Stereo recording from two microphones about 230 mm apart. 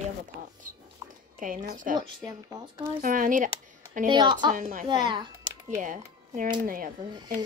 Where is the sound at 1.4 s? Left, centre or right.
Right.